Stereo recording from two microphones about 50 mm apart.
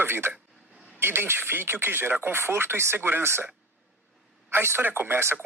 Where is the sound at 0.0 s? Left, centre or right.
Right.